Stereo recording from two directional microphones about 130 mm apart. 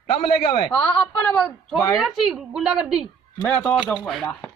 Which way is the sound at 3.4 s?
10° left (ahead or behind).